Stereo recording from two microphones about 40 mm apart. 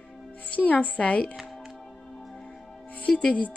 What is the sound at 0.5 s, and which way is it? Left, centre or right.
Speech, left.